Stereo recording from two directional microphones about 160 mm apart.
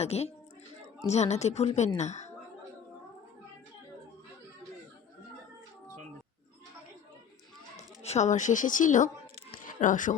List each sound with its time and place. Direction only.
0.0 s a woman's voice: 40° left (ahead or behind)
8.0 s a woman's voice: 45° left (ahead or behind)
9.5 s music: 55° left (ahead or behind)